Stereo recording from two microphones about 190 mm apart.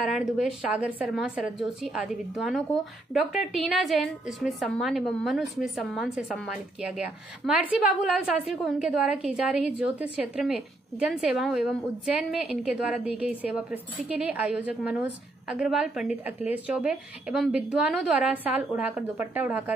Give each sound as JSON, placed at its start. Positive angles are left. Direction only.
{"t": 0.0, "sound": "a woman's voice", "side_deg": -5}